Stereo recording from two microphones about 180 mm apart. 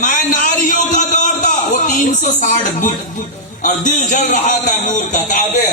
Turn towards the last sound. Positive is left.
turn(degrees=45)  # may be behind; listen again after turning